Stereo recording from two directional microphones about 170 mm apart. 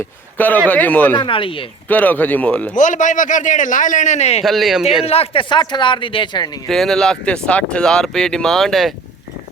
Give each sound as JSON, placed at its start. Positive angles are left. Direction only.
{"t": 0.3, "sound": "a man's voice", "side_deg": 10}
{"t": 1.1, "sound": "speech", "side_deg": 30}
{"t": 1.9, "sound": "speech", "side_deg": 10}
{"t": 2.7, "sound": "a man's voice", "side_deg": 45}
{"t": 4.4, "sound": "speech", "side_deg": 0}
{"t": 5.0, "sound": "speech", "side_deg": 35}
{"t": 6.7, "sound": "speech", "side_deg": 0}